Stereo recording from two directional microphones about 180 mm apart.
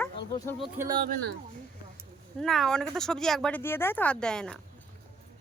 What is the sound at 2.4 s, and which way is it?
A man's voice, centre (ahead or behind).